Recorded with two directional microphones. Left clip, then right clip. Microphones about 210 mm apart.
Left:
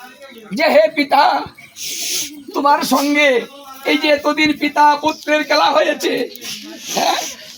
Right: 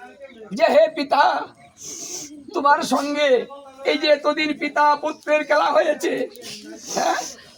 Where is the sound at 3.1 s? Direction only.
10° right (ahead or behind).